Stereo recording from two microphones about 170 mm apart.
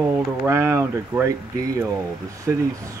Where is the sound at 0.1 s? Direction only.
15° right (ahead or behind).